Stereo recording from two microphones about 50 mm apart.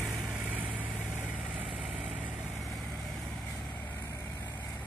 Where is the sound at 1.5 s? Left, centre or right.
Right.